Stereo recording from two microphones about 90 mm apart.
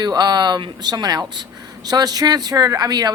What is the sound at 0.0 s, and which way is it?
A woman's voice, 50° right (ahead or behind).